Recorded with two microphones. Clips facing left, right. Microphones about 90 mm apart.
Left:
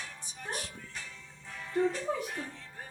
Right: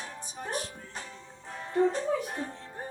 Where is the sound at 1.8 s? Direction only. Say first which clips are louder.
Right 4 dB; 35° right (ahead or behind).